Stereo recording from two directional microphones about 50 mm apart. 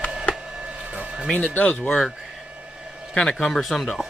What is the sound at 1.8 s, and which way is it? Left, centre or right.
Speech, centre.